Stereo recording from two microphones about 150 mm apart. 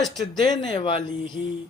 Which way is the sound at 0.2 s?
30° left (ahead or behind).